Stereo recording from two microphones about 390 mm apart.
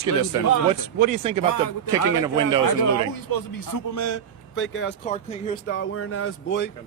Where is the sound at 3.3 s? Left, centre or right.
Left; by 5.8 s centre.